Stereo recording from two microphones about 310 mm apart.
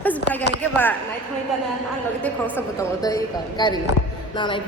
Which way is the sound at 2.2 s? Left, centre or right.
Centre.